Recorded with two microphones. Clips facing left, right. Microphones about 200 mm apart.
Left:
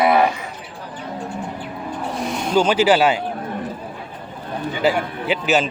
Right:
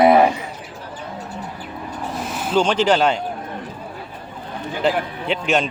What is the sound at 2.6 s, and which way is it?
Speech, 5° left (ahead or behind).